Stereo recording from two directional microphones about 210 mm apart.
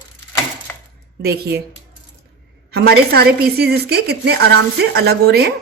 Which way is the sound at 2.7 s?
50° right (ahead or behind).